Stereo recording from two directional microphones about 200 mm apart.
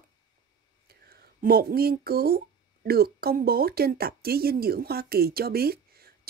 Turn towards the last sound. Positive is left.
turn(degrees=-50)  # may be behind; listen again after turning